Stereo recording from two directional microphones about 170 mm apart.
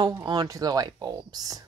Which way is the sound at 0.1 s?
20° right (ahead or behind).